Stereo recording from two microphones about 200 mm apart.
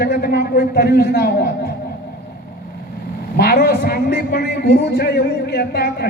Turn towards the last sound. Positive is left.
turn(degrees=55)  # may be behind; listen again after turning